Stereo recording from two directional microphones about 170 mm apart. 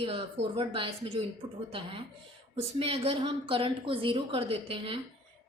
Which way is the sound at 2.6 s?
35° right (ahead or behind).